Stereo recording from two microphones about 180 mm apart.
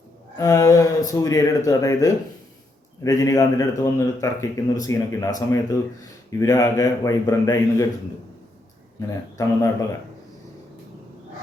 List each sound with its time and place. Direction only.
0.3 s speech: 15° left (ahead or behind)
9.0 s speech: 15° left (ahead or behind)